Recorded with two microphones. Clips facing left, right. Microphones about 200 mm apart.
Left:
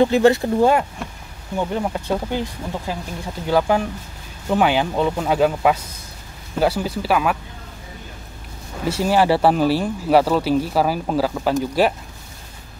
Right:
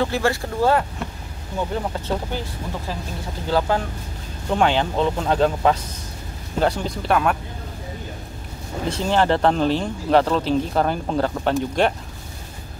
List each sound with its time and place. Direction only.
0.0 s speech: 20° left (ahead or behind)
8.8 s speech: 10° left (ahead or behind)